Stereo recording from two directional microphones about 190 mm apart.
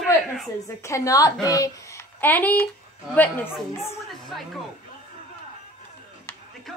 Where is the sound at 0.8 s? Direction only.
15° left (ahead or behind).